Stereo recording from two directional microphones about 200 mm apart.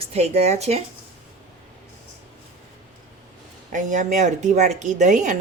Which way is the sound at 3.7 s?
40° right (ahead or behind).